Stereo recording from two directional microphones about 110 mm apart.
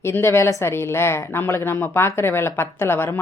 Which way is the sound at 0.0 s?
20° left (ahead or behind).